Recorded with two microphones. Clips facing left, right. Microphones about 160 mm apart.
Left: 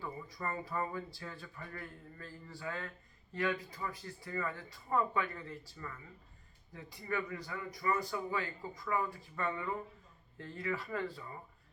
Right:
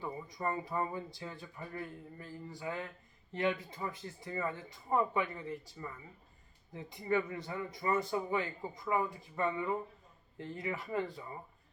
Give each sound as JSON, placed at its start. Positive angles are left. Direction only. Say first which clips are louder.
{"t": 0.0, "sound": "speech", "louder": "right 4 dB", "side_deg": -20}